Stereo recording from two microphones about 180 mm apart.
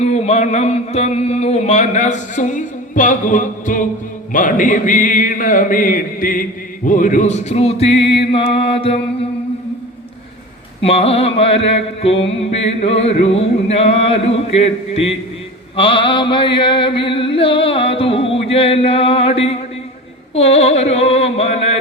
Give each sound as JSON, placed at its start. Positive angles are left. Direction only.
{"t": 0.0, "sound": "mantra", "side_deg": 35}
{"t": 4.3, "sound": "a sound", "side_deg": 45}
{"t": 6.8, "sound": "mantra", "side_deg": 45}
{"t": 10.8, "sound": "mantra", "side_deg": 35}